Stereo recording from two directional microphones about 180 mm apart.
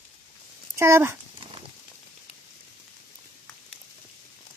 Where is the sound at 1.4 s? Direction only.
30° right (ahead or behind).